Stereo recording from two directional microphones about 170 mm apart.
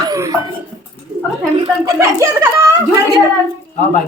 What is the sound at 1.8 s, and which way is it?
Speech, 20° right (ahead or behind).